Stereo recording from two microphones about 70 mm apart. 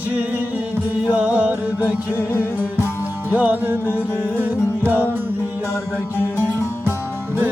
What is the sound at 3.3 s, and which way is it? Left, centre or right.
Music, right.